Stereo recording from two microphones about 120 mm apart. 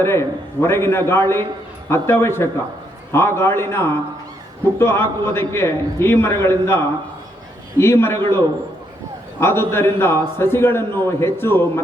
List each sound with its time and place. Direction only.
0.0 s a man's voice: 20° left (ahead or behind)
9.4 s a man's voice: 20° left (ahead or behind)